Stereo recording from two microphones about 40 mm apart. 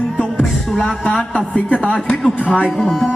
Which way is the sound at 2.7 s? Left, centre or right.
Centre.